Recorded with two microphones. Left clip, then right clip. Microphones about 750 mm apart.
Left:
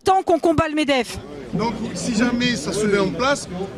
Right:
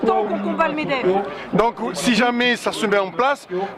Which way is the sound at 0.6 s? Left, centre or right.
Left.